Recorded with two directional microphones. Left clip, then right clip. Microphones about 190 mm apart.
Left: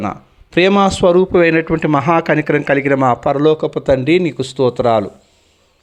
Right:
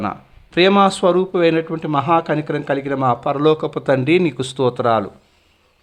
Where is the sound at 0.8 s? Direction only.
15° left (ahead or behind).